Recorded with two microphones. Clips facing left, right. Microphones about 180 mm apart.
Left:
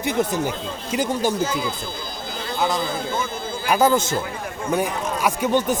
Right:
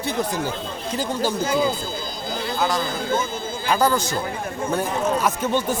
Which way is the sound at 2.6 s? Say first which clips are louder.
Left 2 dB; 20° left (ahead or behind).